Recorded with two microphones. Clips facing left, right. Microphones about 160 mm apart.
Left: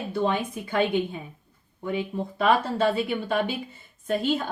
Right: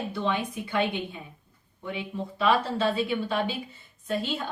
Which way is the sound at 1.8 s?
45° left (ahead or behind).